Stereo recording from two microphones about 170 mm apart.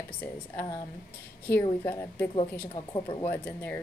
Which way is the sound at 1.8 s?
15° left (ahead or behind).